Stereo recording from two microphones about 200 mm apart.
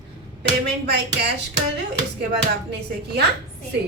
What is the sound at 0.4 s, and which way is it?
Speech, 55° right (ahead or behind).